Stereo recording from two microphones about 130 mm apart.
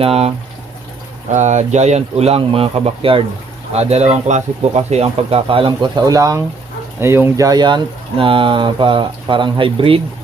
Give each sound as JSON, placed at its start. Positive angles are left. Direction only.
{"t": 0.0, "sound": "speech", "side_deg": -50}
{"t": 1.3, "sound": "speech", "side_deg": -65}
{"t": 6.1, "sound": "speech", "side_deg": -30}